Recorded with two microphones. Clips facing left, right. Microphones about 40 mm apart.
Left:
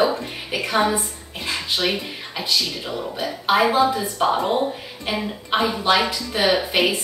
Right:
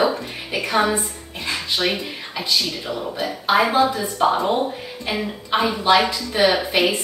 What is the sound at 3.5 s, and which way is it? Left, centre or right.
Speech, centre.